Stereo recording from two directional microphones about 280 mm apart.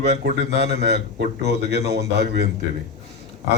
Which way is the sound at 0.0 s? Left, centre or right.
Right.